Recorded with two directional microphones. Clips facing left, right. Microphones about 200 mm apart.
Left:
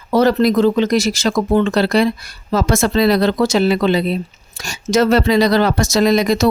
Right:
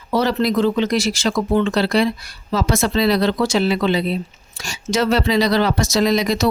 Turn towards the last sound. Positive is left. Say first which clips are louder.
# left 4 dB
turn(degrees=50)  # may be behind; listen again after turning